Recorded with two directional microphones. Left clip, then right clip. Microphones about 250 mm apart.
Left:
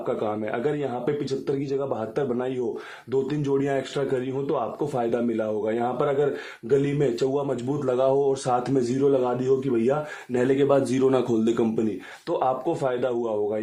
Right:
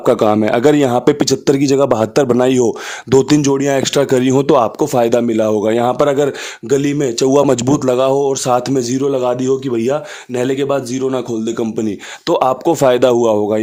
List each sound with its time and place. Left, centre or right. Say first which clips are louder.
0.0 s speech: right 15 dB; right
10.9 s speech: right 4 dB; centre
12.3 s speech: right 11 dB; right